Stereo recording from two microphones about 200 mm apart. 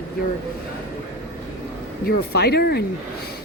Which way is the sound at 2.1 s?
50° left (ahead or behind).